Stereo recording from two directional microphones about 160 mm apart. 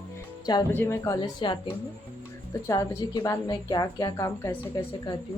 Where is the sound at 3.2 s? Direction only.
20° left (ahead or behind).